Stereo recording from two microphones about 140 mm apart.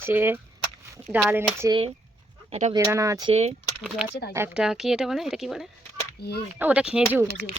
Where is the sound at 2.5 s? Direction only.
50° right (ahead or behind).